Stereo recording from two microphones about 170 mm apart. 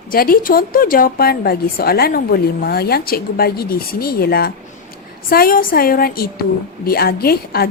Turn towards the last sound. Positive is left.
turn(degrees=65)  # may be behind; listen again after turning